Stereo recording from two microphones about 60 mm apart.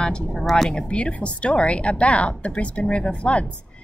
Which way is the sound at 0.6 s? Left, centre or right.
Centre.